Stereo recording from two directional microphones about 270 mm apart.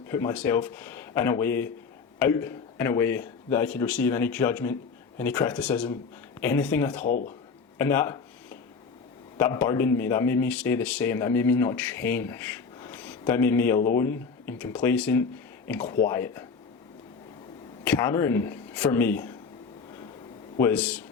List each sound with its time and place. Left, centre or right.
0.1 s speech: centre
7.0 s speech: left
7.8 s a sound: centre
9.4 s speech: centre
17.8 s speech: centre
20.6 s speech: centre